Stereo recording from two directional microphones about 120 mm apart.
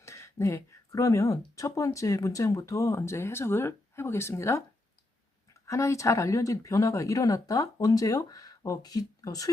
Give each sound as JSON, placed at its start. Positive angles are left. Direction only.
{"t": 0.0, "sound": "a sound", "side_deg": 25}
{"t": 1.5, "sound": "speech", "side_deg": 25}
{"t": 5.6, "sound": "speech", "side_deg": 25}